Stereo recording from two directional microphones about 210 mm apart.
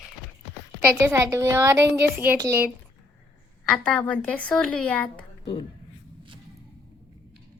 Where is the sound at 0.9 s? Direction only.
10° right (ahead or behind).